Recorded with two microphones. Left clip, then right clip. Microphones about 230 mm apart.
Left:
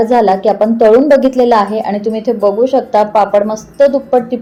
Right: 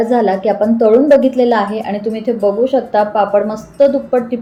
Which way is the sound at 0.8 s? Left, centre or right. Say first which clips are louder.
Left 2 dB; left.